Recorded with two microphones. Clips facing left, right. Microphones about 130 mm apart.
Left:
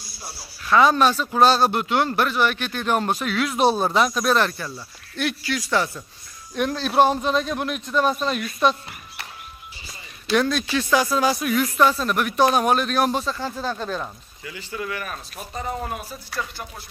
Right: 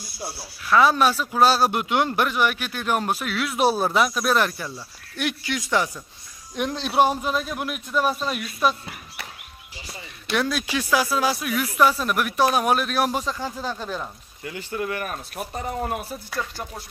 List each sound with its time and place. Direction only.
0.7 s a man's voice: 5° right (ahead or behind)
10.3 s a man's voice: 5° right (ahead or behind)
14.4 s speech: 50° right (ahead or behind)